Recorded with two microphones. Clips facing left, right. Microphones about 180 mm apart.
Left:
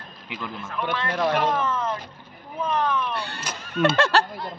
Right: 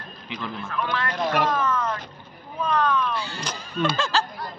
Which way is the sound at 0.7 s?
20° left (ahead or behind).